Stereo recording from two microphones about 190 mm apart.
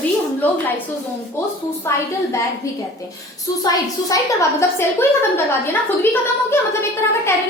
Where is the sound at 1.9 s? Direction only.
15° left (ahead or behind).